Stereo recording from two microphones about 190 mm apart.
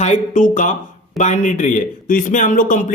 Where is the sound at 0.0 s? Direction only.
40° left (ahead or behind).